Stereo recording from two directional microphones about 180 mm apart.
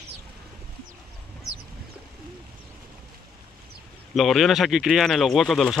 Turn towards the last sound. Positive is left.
turn(degrees=0)  # may be behind; listen again after turning